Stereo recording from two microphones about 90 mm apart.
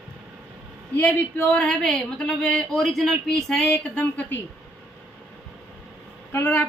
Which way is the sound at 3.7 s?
20° left (ahead or behind).